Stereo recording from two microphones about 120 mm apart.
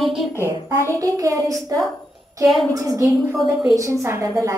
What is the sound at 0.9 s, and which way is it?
A woman's voice, 30° right (ahead or behind).